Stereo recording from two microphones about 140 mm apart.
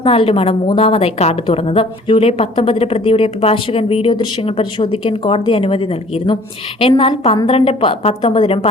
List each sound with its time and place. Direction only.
0.0 s a woman's voice: 40° left (ahead or behind)